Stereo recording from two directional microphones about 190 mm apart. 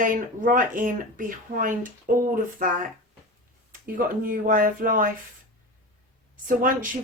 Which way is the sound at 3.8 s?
45° right (ahead or behind).